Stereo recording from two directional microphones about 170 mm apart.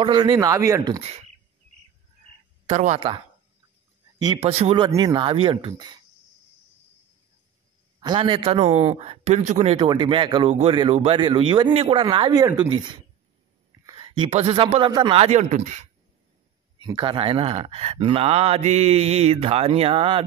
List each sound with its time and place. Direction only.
0.0 s speech: 25° right (ahead or behind)
1.0 s speech: 40° right (ahead or behind)
4.2 s speech: 30° right (ahead or behind)
8.0 s speech: 30° right (ahead or behind); by 15.9 s 45° right (ahead or behind)
16.8 s speech: 30° right (ahead or behind)